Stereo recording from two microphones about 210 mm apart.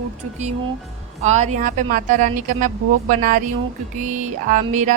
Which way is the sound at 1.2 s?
35° right (ahead or behind).